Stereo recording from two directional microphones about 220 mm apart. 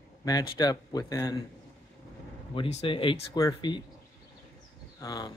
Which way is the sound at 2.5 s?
25° left (ahead or behind).